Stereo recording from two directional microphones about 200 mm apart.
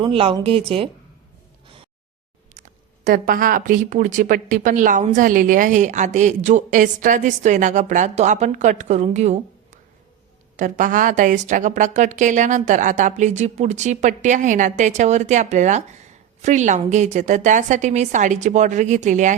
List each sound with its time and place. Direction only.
0.0 s speech: 30° right (ahead or behind)
2.6 s a woman's voice: 40° right (ahead or behind)
10.6 s a woman's voice: 40° right (ahead or behind)